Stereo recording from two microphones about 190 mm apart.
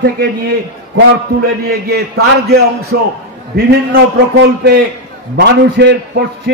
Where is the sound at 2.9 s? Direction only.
65° right (ahead or behind).